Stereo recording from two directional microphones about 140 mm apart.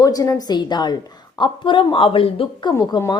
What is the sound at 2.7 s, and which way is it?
Speech, 25° left (ahead or behind).